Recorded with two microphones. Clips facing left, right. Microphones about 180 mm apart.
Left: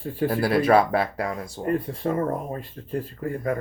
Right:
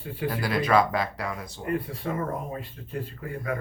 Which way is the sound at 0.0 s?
40° left (ahead or behind).